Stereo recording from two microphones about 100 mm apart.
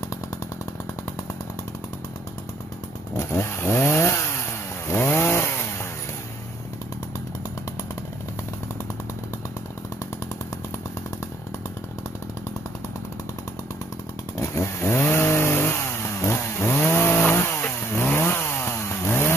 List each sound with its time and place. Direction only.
3.2 s chainsaw: 25° left (ahead or behind)
14.3 s chainsaw: 30° left (ahead or behind)